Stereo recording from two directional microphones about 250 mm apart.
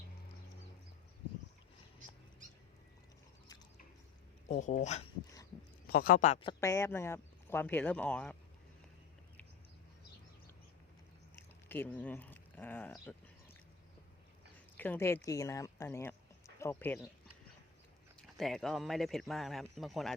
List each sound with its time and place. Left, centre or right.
4.4 s speech: left; by 8.4 s centre
11.7 s speech: centre
14.8 s speech: centre
18.2 s speech: centre